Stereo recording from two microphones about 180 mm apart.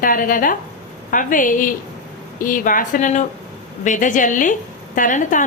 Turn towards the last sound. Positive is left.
turn(degrees=45)  # may be behind; listen again after turning